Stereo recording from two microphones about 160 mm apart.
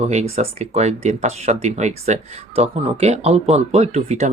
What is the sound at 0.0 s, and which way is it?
Speech, 45° right (ahead or behind).